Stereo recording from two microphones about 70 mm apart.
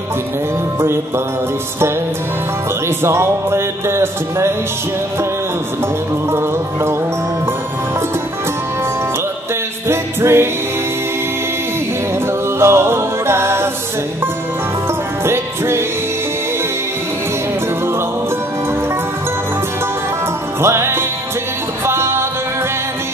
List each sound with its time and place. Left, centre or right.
0.7 s music: right
3.0 s music: right
6.3 s music: right
9.8 s music: right
12.5 s music: right
15.2 s music: right
20.6 s music: right